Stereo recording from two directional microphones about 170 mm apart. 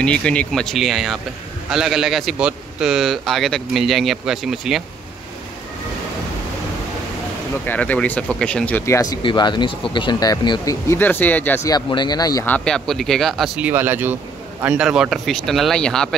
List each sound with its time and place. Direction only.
0.0 s a man's voice: 5° left (ahead or behind)
7.6 s speech: 10° left (ahead or behind)
12.4 s a man's voice: 5° left (ahead or behind)